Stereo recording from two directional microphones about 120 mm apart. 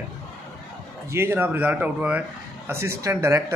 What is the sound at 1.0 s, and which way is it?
A man's voice, 20° right (ahead or behind).